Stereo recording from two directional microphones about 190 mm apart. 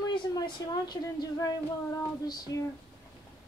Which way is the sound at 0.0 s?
20° left (ahead or behind).